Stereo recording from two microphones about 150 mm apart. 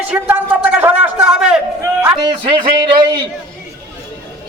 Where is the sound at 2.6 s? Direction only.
35° right (ahead or behind).